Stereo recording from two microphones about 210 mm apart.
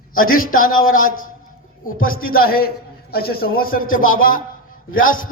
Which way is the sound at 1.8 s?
80° left.